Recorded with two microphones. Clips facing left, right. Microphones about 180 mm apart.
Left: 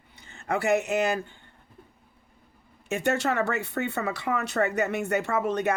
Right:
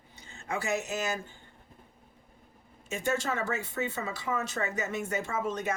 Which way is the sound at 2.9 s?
65° left (ahead or behind).